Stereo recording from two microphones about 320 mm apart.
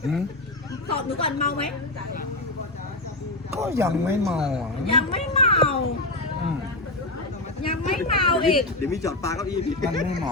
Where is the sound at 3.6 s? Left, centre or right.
Centre.